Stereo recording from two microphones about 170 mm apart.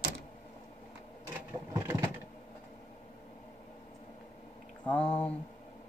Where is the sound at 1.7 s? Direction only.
15° right (ahead or behind).